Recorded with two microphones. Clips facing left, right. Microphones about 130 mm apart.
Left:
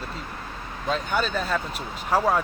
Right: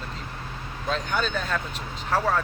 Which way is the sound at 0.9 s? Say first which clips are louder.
Left 2 dB; 5° left (ahead or behind).